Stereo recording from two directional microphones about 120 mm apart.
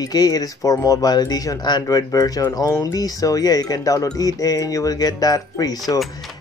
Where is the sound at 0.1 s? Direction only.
30° left (ahead or behind).